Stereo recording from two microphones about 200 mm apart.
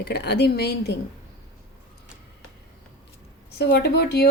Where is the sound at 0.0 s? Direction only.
55° left (ahead or behind).